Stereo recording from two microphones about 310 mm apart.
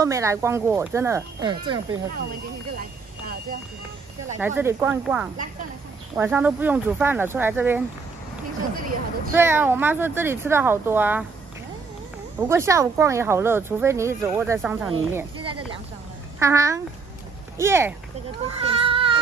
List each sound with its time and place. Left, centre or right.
0.0 s speech: centre
4.4 s speech: centre
8.7 s speech: right
9.3 s speech: centre
12.4 s speech: centre
14.9 s speech: centre